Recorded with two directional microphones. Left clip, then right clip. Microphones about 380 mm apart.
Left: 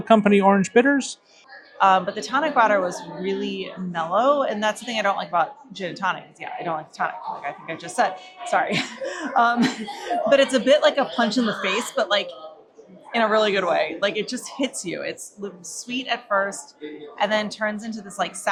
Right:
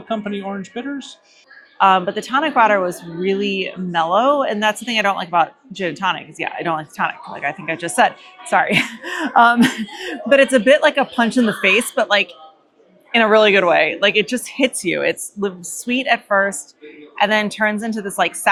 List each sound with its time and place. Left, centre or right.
0.1 s speech: left
1.8 s speech: centre
8.4 s speech: right